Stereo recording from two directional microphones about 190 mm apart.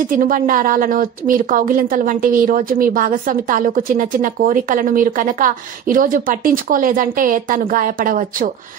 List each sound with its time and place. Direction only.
0.1 s a woman's voice: 45° right (ahead or behind)